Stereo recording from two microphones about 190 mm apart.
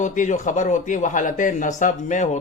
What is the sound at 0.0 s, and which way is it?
Speech, 40° left (ahead or behind).